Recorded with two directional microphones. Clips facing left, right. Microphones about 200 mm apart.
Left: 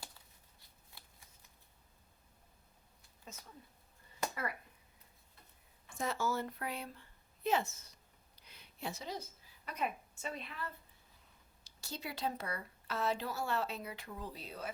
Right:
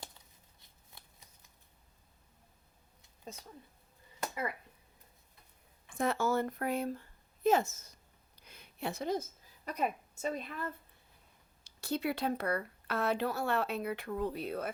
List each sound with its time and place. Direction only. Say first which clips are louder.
0.6 s shuffling cards: right 1 dB; 20° right (ahead or behind)
3.3 s speech: right 6 dB; 35° right (ahead or behind)
6.0 s speech: right 6 dB; 55° right (ahead or behind)
8.4 s a sound: right 5 dB; 50° right (ahead or behind)
9.6 s a woman's voice: right 4 dB; 40° right (ahead or behind)
11.6 s speech: right 11 dB; 60° right (ahead or behind)